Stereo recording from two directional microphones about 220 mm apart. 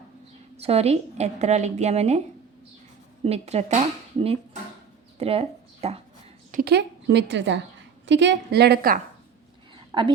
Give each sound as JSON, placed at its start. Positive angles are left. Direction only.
{"t": 0.5, "sound": "a woman's voice", "side_deg": -30}
{"t": 3.2, "sound": "a woman's voice", "side_deg": -30}
{"t": 5.2, "sound": "speech", "side_deg": -25}
{"t": 6.5, "sound": "a woman's voice", "side_deg": -45}
{"t": 9.9, "sound": "a woman's voice", "side_deg": -20}